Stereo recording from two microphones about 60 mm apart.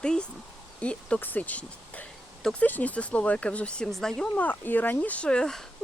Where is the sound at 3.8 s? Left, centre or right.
Centre.